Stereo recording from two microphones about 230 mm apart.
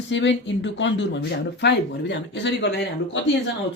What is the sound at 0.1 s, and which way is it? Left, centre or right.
Speech, left.